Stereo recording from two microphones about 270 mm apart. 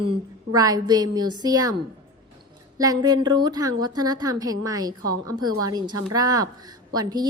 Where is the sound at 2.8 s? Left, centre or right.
Centre.